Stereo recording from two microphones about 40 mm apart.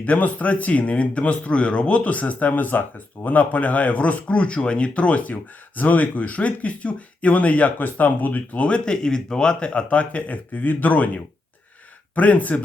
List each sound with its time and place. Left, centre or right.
0.0 s speech: left
8.6 s speech: left